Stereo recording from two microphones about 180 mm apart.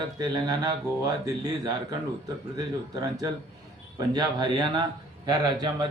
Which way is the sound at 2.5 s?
20° right (ahead or behind).